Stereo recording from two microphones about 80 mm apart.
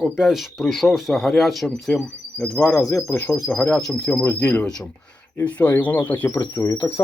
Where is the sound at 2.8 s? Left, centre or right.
Left.